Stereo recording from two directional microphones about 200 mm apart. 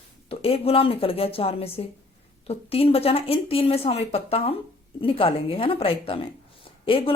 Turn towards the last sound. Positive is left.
turn(degrees=25)  # may be behind; listen again after turning